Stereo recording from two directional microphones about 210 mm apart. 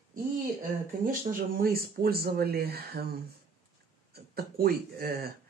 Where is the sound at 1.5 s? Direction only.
45° right (ahead or behind).